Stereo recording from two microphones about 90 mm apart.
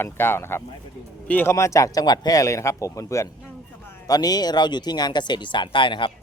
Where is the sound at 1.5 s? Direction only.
35° left (ahead or behind).